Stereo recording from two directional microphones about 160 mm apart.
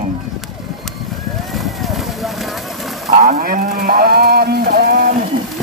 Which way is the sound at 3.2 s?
55° right (ahead or behind).